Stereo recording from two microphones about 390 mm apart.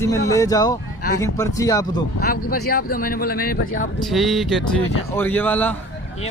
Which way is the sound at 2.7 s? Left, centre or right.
Left.